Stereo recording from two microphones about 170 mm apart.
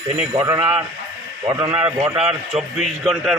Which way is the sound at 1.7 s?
10° right (ahead or behind).